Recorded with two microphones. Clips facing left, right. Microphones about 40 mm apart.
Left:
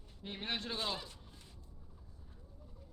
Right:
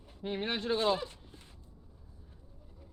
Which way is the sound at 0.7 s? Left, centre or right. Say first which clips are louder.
Right 10 dB; right.